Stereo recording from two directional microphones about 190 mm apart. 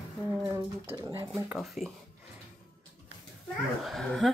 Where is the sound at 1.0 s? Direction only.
15° right (ahead or behind).